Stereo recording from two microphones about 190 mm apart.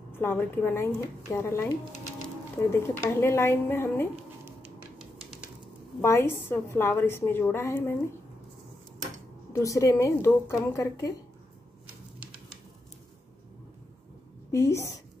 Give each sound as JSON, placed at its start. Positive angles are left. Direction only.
{"t": 0.2, "sound": "a woman's voice", "side_deg": 10}
{"t": 2.7, "sound": "a woman's voice", "side_deg": 15}
{"t": 5.9, "sound": "a woman's voice", "side_deg": 15}
{"t": 9.5, "sound": "a woman's voice", "side_deg": 15}
{"t": 14.5, "sound": "a woman's voice", "side_deg": 15}